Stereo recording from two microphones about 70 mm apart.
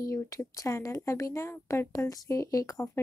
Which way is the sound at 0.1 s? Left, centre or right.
Left.